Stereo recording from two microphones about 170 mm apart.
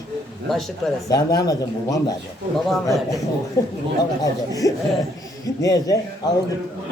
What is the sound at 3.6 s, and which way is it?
A woman's voice, 20° left (ahead or behind).